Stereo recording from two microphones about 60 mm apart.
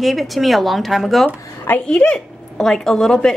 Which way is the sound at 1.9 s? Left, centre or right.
Centre.